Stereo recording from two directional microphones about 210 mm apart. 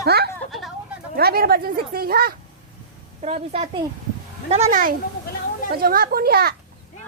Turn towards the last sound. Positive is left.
turn(degrees=-45)  # may be behind; listen again after turning